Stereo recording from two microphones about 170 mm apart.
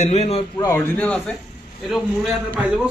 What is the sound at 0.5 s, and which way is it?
A man's voice, 15° left (ahead or behind).